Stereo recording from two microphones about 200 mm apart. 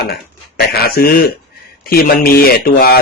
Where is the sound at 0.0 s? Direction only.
55° left (ahead or behind).